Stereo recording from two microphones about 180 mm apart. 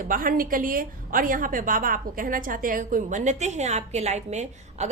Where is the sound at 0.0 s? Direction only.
50° right (ahead or behind).